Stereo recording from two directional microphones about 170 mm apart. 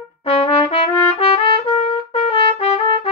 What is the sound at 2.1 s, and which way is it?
Trumpet, 35° left (ahead or behind).